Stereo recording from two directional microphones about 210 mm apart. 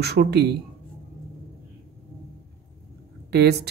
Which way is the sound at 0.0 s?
50° right (ahead or behind).